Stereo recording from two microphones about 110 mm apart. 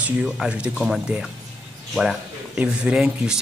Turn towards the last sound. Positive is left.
turn(degrees=-5)  # may be behind; listen again after turning